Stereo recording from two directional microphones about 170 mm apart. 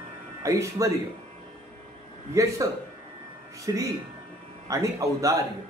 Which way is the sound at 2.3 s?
20° right (ahead or behind).